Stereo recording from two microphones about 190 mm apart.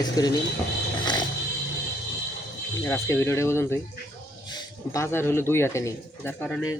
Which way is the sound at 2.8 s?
15° left (ahead or behind).